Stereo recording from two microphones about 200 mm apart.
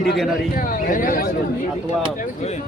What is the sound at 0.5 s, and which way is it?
Speech, 45° left (ahead or behind).